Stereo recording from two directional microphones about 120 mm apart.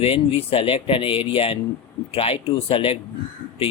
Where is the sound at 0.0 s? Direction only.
50° left (ahead or behind).